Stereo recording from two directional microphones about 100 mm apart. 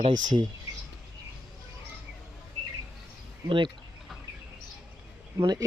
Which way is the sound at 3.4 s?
55° right (ahead or behind).